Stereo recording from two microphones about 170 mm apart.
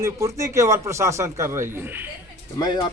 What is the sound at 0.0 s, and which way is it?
A man's voice, 20° right (ahead or behind).